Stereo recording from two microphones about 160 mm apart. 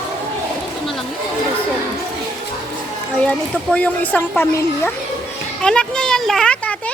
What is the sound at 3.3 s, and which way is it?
Speech, 10° left (ahead or behind).